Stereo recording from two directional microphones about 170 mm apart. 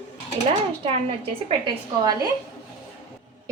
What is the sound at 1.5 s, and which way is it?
Speech, 30° right (ahead or behind).